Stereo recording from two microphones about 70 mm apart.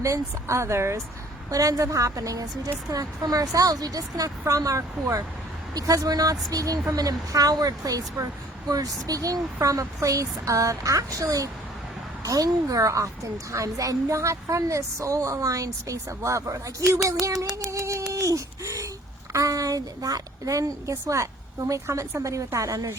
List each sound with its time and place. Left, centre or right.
0.0 s a woman's voice: right
1.5 s a woman's voice: right
17.7 s a sound: right
19.3 s a woman's voice: right